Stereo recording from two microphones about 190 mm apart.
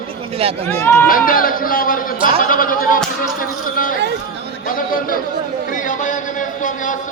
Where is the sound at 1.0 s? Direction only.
45° left (ahead or behind).